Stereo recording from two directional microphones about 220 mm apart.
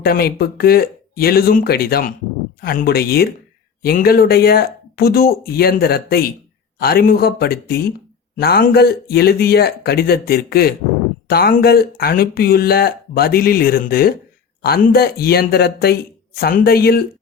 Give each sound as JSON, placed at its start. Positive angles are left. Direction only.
{"t": 0.0, "sound": "speech", "side_deg": 45}